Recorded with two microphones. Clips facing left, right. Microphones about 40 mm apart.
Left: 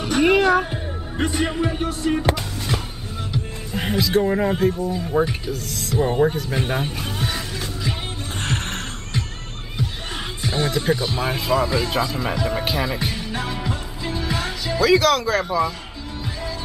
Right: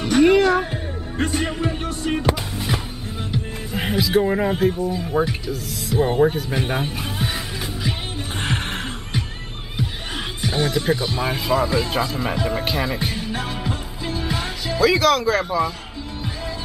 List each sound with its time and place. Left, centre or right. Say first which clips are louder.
0.0 s music: right 2 dB; centre
1.1 s speech: left 1 dB; centre
1.9 s music: left 2 dB; centre
3.3 s music: right 1 dB; centre
5.1 s speech: left 2 dB; centre
6.2 s music: right 1 dB; centre
10.4 s speech: right 1 dB; centre
12.5 s music: even; centre
14.7 s speech: even; centre